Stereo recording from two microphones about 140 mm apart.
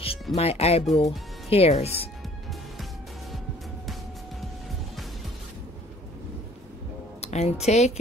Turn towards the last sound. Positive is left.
turn(degrees=50)  # may be behind; listen again after turning